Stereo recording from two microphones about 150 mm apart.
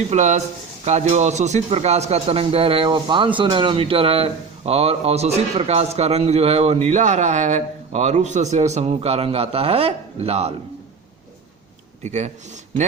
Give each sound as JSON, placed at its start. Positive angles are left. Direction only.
{"t": 0.1, "sound": "speech", "side_deg": -50}
{"t": 12.0, "sound": "speech", "side_deg": -50}